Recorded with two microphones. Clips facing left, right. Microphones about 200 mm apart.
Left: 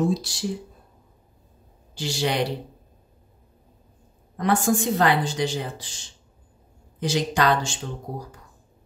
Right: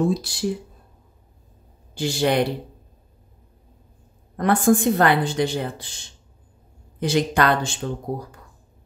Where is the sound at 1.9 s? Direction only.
55° right (ahead or behind).